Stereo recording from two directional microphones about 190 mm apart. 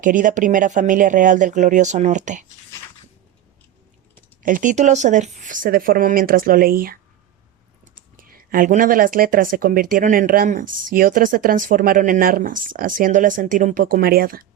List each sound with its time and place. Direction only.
0.0 s speech: 45° right (ahead or behind)
4.4 s speech: 45° right (ahead or behind)
8.1 s speech: 50° right (ahead or behind)